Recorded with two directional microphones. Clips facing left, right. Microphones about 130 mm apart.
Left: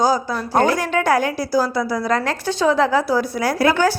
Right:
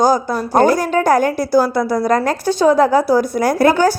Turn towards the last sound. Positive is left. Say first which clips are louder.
# right 4 dB
turn(degrees=-45)  # may be behind; listen again after turning